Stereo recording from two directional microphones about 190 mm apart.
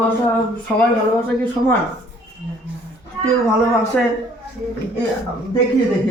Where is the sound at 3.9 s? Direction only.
5° left (ahead or behind).